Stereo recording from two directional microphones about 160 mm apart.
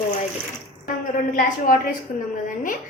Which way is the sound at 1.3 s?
60° left (ahead or behind).